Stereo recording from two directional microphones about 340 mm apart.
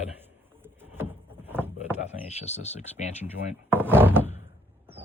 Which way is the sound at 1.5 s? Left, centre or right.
Centre.